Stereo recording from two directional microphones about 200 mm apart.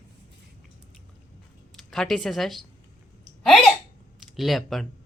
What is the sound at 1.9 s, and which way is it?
Speech, centre (ahead or behind).